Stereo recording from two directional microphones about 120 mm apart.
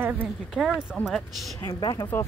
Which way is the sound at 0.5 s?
Centre (ahead or behind).